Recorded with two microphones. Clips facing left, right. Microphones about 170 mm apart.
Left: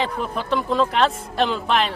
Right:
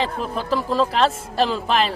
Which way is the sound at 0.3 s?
Centre (ahead or behind).